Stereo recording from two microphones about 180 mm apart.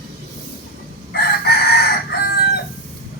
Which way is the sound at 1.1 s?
60° left (ahead or behind).